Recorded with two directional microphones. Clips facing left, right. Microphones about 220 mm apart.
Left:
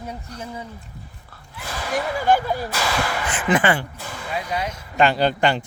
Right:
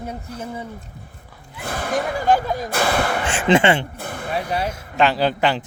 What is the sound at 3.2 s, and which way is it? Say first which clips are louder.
Speech: right 4 dB; 30° right (ahead or behind).